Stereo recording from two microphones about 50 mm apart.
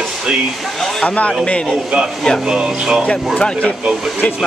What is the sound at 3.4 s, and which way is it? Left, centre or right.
Speech, centre.